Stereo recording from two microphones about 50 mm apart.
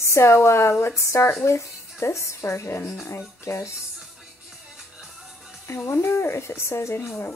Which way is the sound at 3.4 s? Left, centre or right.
Left.